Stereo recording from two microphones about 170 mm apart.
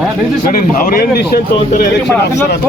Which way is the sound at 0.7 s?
60° left (ahead or behind).